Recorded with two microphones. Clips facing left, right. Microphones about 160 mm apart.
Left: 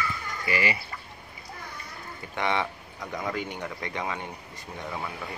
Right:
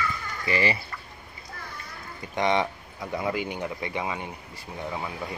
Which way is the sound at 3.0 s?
10° right (ahead or behind).